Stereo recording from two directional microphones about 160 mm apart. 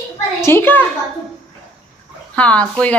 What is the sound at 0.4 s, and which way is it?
Speech, 15° left (ahead or behind).